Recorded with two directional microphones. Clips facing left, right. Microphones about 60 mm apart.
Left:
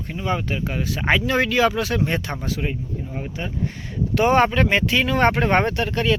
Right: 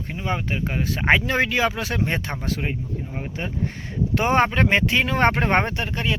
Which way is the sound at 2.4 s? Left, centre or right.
Right.